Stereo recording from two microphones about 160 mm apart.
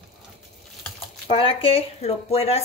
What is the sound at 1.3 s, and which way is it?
Speech, 35° left (ahead or behind).